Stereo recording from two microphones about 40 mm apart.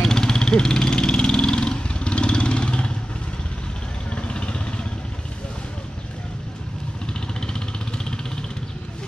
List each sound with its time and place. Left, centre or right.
0.0 s vehicle: centre
4.1 s vehicle: left
7.3 s vehicle: centre